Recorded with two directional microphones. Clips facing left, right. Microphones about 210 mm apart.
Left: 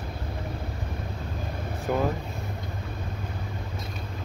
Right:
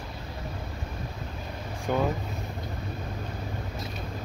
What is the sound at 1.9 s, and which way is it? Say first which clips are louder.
Speech: even; 5° left (ahead or behind).